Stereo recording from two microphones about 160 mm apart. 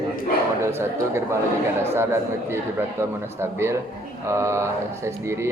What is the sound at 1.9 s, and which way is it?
A man's voice, 15° right (ahead or behind).